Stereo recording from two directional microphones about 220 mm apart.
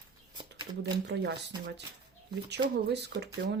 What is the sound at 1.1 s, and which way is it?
Speech, 55° right (ahead or behind).